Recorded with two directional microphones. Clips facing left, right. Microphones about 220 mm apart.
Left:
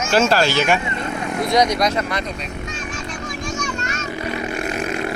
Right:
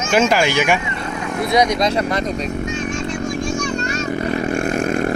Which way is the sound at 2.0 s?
40° right (ahead or behind).